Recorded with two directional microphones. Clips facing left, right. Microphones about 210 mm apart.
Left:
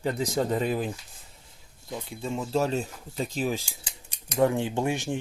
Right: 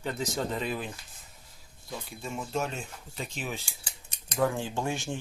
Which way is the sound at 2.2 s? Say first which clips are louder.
Left 6 dB; 30° left (ahead or behind).